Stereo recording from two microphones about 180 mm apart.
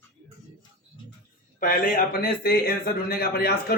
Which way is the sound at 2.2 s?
55° left (ahead or behind).